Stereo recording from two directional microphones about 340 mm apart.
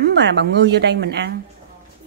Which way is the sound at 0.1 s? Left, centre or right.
Right.